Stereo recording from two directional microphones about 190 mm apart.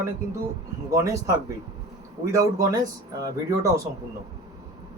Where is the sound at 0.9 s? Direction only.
15° right (ahead or behind).